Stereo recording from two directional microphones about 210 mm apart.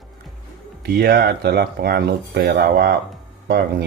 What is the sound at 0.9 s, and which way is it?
Speech, 50° right (ahead or behind).